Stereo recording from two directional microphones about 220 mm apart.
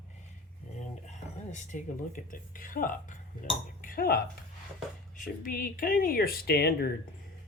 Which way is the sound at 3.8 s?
40° left (ahead or behind).